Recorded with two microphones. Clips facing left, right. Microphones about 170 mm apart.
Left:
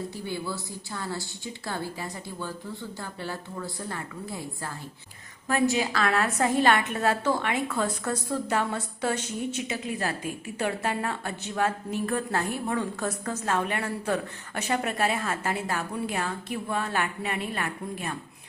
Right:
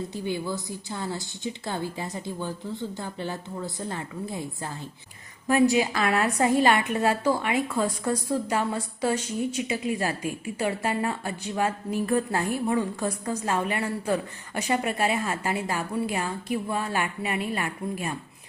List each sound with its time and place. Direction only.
0.1 s a woman's voice: 20° right (ahead or behind)
5.7 s a woman's voice: 10° right (ahead or behind)